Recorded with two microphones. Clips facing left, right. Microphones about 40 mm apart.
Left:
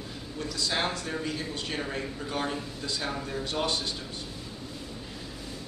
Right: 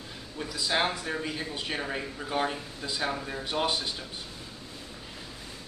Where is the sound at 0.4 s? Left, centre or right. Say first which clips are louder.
Right 2 dB; centre.